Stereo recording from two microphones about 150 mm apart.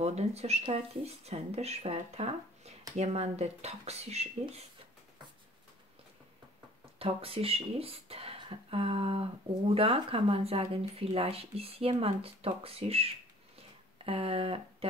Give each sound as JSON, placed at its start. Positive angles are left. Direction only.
{"t": 0.0, "sound": "speech", "side_deg": -45}
{"t": 7.0, "sound": "speech", "side_deg": -40}
{"t": 13.6, "sound": "a sound", "side_deg": -40}